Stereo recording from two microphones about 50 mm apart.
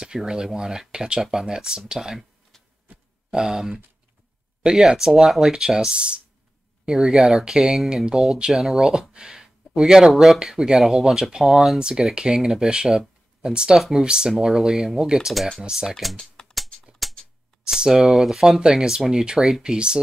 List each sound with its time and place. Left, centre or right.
0.0 s speech: centre
2.5 s a sound: centre
3.3 s speech: centre
15.9 s speech: centre
17.0 s a sound: centre
17.6 s speech: centre